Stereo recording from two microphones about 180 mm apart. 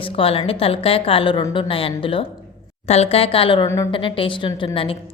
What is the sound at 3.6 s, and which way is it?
Speech, 15° left (ahead or behind).